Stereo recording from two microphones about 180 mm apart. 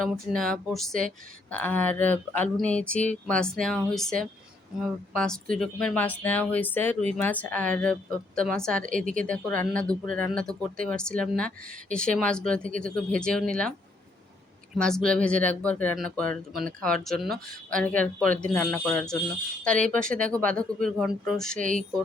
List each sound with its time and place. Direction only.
0.0 s speech: centre (ahead or behind)
9.0 s speech: 45° right (ahead or behind)
9.7 s speech: 5° left (ahead or behind)
14.8 s speech: 5° left (ahead or behind)